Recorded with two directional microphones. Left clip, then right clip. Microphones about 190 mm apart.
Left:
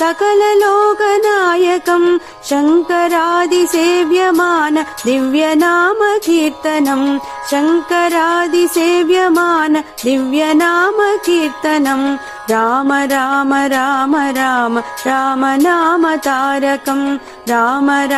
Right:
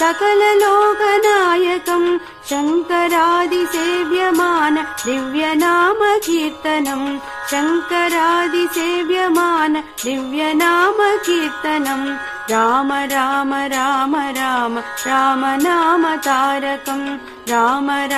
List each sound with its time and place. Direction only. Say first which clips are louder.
0.0 s music: left 2 dB; 35° left (ahead or behind)